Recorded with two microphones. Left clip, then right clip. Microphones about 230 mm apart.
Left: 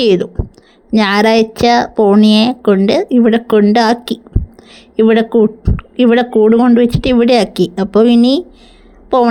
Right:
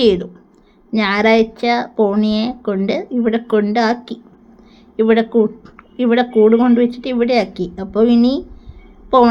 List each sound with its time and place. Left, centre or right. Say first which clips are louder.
0.0 s a woman's voice: left 3 dB; left